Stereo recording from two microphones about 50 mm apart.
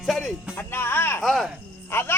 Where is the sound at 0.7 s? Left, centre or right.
Left.